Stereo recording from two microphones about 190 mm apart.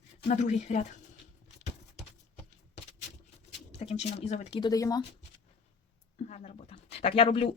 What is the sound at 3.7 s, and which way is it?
Speech, 35° left (ahead or behind).